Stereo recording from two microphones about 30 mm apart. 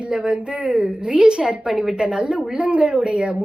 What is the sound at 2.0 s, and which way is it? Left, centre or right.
A woman's voice, right.